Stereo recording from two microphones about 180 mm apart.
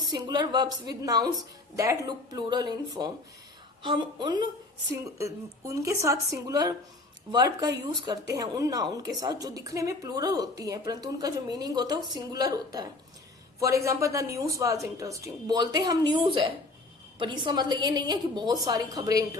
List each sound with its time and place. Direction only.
0.1 s a woman's voice: 20° right (ahead or behind)